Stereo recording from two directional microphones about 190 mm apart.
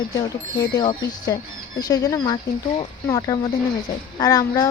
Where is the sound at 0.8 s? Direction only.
20° left (ahead or behind).